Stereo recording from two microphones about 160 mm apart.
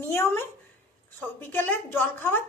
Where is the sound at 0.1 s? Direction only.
15° left (ahead or behind).